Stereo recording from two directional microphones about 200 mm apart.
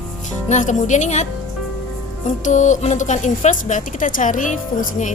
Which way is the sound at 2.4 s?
35° left (ahead or behind).